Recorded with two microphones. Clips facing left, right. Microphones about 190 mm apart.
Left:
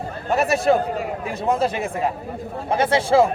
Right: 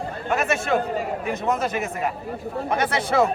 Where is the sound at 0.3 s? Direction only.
35° left (ahead or behind).